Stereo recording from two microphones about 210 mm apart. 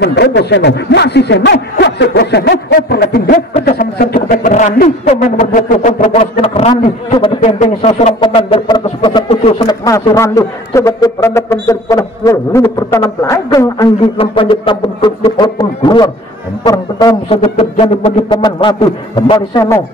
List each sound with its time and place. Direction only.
0.0 s speech: 55° left (ahead or behind); by 7.9 s 35° left (ahead or behind)
8.0 s a sound: 25° left (ahead or behind)
16.6 s speech: 20° left (ahead or behind)